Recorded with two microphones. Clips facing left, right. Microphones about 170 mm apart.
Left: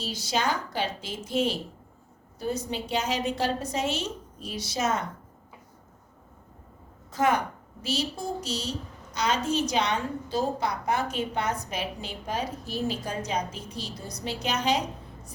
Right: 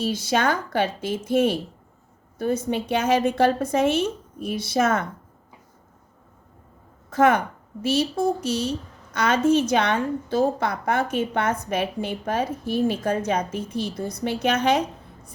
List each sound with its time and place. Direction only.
0.0 s a woman's voice: 55° right (ahead or behind)
7.1 s a woman's voice: 55° right (ahead or behind)